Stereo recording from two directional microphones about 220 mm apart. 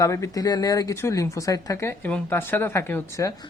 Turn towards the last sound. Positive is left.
turn(degrees=15)  # may be behind; listen again after turning